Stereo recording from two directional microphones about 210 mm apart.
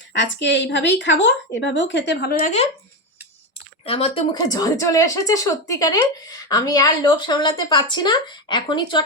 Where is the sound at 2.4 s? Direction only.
30° left (ahead or behind).